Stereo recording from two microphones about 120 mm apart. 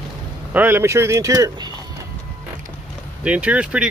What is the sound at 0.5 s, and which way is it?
Speech, 15° right (ahead or behind).